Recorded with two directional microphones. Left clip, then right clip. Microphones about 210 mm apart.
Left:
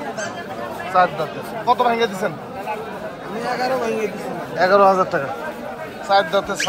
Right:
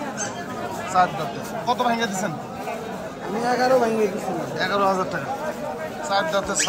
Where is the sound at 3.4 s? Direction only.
40° right (ahead or behind).